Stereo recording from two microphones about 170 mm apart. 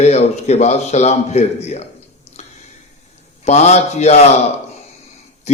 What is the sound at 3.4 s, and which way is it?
Speech, 40° left (ahead or behind).